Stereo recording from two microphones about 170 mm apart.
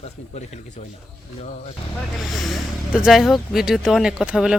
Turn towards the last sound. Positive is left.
turn(degrees=-5)  # may be behind; listen again after turning